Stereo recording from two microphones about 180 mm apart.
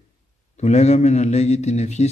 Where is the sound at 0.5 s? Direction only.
40° left (ahead or behind).